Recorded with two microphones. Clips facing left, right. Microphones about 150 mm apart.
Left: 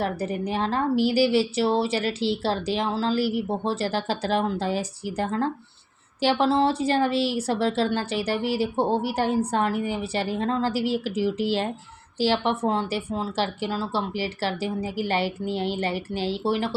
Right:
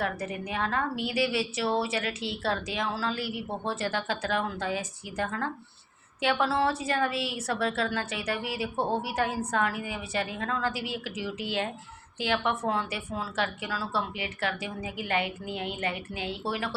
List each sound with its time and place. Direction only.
0.0 s a woman's voice: 35° left (ahead or behind)